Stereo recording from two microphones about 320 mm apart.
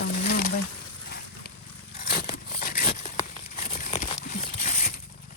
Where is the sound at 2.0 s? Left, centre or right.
Left.